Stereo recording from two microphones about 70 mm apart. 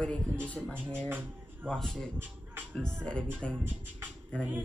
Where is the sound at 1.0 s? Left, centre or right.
Right.